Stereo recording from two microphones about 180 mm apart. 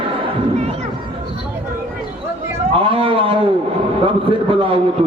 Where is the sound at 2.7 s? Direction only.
30° right (ahead or behind).